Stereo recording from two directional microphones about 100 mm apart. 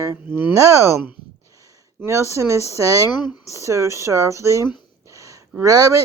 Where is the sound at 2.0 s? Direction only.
30° right (ahead or behind).